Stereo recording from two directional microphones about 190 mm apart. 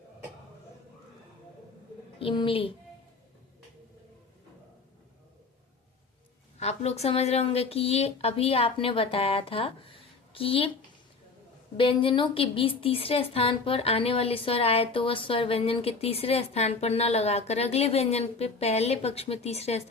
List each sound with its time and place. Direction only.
2.1 s a woman's voice: 25° left (ahead or behind)
6.6 s a woman's voice: 35° left (ahead or behind)
11.8 s a woman's voice: 25° left (ahead or behind)